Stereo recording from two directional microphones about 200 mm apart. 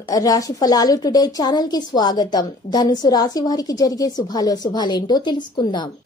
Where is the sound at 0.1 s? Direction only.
15° left (ahead or behind).